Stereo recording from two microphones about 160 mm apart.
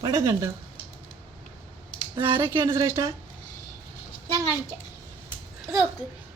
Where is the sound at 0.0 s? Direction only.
20° right (ahead or behind).